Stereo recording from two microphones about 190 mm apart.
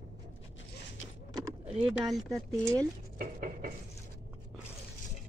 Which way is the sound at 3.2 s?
45° right (ahead or behind).